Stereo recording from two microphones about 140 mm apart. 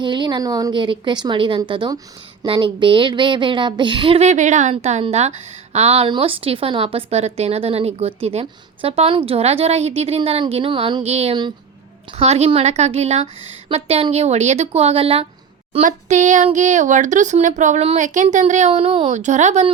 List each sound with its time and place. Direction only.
0.0 s a woman's voice: 35° right (ahead or behind)
15.8 s speech: 65° right (ahead or behind)